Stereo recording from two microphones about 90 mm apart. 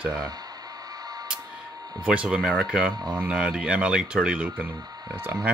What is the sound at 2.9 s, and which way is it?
Speech, 50° right (ahead or behind).